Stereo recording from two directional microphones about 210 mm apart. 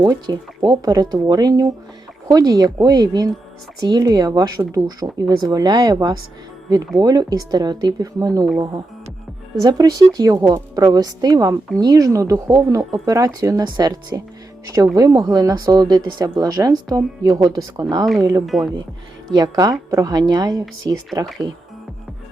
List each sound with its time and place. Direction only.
0.0 s a woman's voice: 20° right (ahead or behind)
9.6 s a woman's voice: 15° right (ahead or behind)
18.4 s speech: centre (ahead or behind)
19.3 s a woman's voice: 20° right (ahead or behind)